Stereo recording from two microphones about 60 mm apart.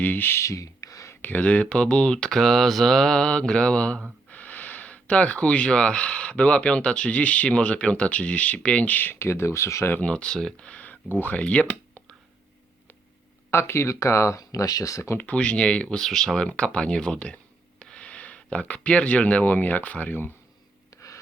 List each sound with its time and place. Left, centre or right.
0.0 s speech: left
0.3 s a sound: left
1.2 s speech: left
4.3 s speech: left
9.1 s speech: left
9.9 s speech: left
10.3 s speech: centre
10.7 s a sound: left
11.2 s speech: left
13.5 s speech: left
15.2 s speech: left
20.9 s a sound: left